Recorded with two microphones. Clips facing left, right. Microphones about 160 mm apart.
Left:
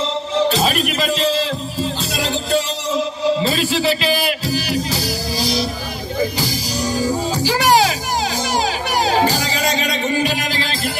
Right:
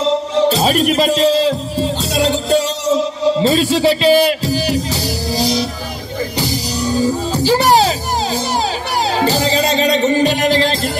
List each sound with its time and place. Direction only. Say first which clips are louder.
0.6 s speech: right 5 dB; 35° right (ahead or behind)
2.5 s music: right 3 dB; 40° right (ahead or behind)
9.5 s music: right 6 dB; 30° right (ahead or behind)